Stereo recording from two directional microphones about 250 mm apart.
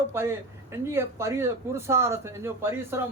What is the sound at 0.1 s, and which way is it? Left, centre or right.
Speech, centre.